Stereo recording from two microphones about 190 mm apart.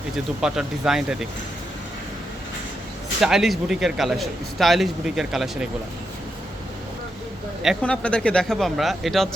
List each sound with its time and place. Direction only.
0.4 s a man's voice: 5° right (ahead or behind)
3.2 s a man's voice: centre (ahead or behind)
7.6 s a man's voice: centre (ahead or behind)